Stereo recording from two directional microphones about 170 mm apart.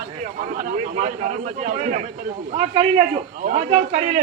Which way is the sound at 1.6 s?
50° right (ahead or behind).